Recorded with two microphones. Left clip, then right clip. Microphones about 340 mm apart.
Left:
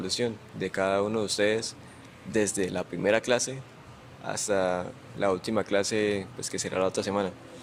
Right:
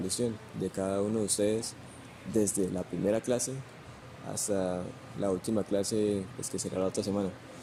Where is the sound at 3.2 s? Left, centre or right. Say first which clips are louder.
Left 5 dB; left.